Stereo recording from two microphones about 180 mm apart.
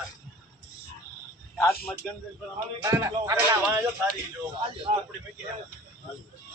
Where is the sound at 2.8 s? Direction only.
15° right (ahead or behind).